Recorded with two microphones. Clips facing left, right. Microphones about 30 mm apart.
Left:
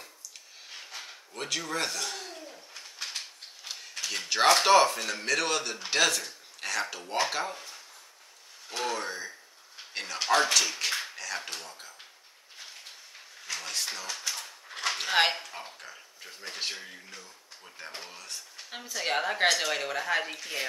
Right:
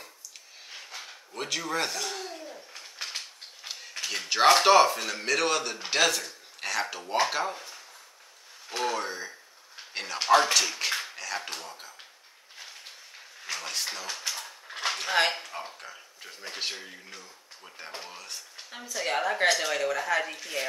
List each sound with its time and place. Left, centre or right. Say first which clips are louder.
0.7 s a sound: right 1 dB; centre
2.4 s bird: right 2 dB; right
3.2 s a sound: even; centre
4.1 s speech: right 2 dB; centre
13.6 s cutlery: even; centre
15.0 s a woman's voice: even; centre
15.3 s speech: right 2 dB; centre
19.0 s a woman's voice: right 1 dB; centre